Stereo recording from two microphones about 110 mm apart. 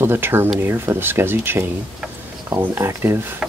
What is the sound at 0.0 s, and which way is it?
Speech, 20° right (ahead or behind).